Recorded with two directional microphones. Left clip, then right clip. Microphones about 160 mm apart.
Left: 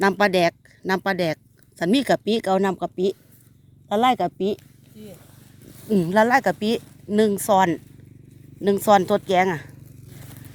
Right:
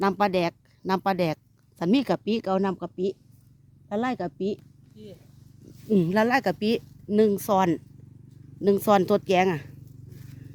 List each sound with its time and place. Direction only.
0.0 s speech: 5° left (ahead or behind)
0.8 s speech: 10° right (ahead or behind)
5.9 s speech: 20° right (ahead or behind)